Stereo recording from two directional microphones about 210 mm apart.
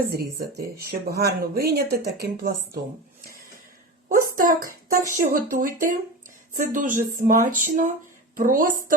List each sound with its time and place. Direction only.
0.1 s speech: 50° right (ahead or behind)
4.1 s a sound: 40° right (ahead or behind)
5.1 s speech: 40° right (ahead or behind)